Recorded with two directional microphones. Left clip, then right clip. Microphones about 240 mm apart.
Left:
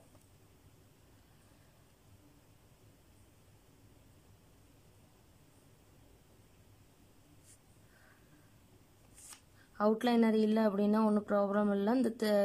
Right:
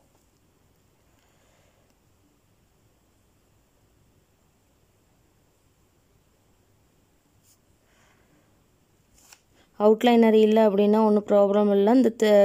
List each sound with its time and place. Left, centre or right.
9.8 s speech: right